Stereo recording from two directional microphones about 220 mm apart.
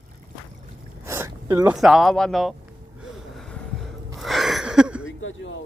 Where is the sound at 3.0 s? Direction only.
Centre (ahead or behind).